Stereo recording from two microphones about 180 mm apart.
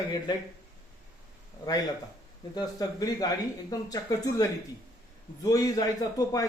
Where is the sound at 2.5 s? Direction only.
20° left (ahead or behind).